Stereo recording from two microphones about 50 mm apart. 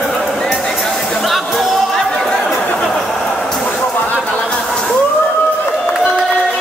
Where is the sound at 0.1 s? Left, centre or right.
Centre.